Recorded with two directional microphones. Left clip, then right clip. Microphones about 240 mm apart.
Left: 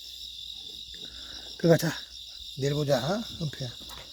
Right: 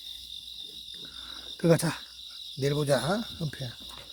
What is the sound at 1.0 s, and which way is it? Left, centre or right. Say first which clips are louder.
Cricket: even; centre.